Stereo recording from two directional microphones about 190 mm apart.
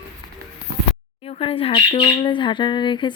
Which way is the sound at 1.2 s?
30° left (ahead or behind).